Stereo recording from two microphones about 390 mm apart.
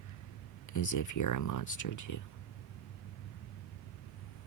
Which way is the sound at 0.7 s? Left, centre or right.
Left.